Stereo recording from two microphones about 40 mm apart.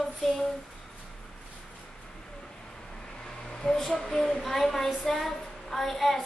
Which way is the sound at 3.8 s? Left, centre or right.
Centre.